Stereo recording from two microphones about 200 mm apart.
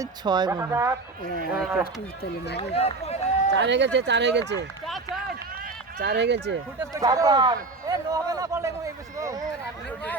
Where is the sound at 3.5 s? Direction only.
60° right (ahead or behind).